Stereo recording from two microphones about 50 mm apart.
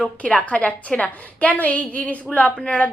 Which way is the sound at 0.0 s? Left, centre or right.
Left.